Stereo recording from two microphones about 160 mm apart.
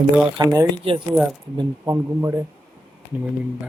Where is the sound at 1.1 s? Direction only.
Centre (ahead or behind).